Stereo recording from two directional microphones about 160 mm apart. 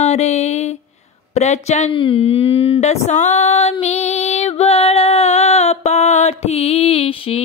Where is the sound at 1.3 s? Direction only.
45° left (ahead or behind).